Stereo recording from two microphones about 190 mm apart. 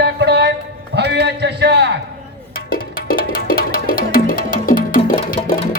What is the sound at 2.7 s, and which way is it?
Music, 50° left (ahead or behind).